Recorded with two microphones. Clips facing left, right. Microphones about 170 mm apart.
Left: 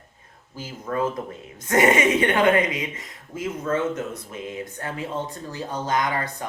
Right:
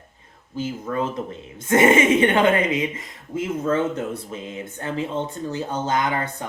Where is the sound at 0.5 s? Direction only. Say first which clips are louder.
Right 3 dB; 25° right (ahead or behind).